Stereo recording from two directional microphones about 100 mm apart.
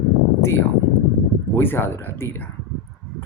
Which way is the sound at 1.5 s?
20° left (ahead or behind).